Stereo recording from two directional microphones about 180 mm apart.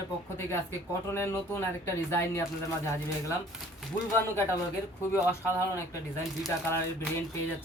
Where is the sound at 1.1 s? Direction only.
15° left (ahead or behind).